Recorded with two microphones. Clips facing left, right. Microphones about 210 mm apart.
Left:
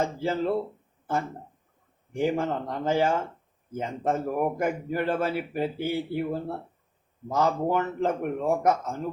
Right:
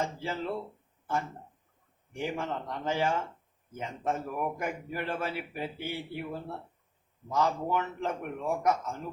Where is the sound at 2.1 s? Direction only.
45° left (ahead or behind).